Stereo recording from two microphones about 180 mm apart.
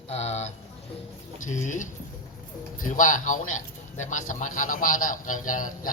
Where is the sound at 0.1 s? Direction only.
35° left (ahead or behind).